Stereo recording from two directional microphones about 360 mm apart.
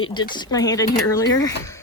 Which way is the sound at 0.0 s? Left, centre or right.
Centre.